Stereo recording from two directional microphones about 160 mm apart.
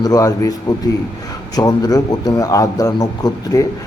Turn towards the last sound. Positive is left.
turn(degrees=20)  # may be behind; listen again after turning